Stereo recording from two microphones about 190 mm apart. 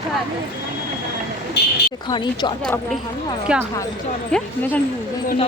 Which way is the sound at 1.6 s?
60° left (ahead or behind).